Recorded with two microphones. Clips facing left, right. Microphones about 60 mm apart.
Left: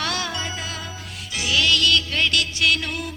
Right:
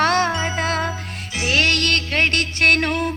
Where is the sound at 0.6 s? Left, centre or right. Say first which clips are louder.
Right 10 dB; right.